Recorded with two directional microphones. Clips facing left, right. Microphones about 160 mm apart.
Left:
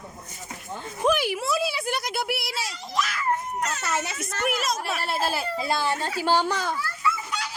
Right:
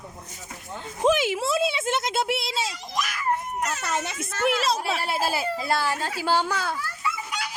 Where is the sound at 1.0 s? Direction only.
20° right (ahead or behind).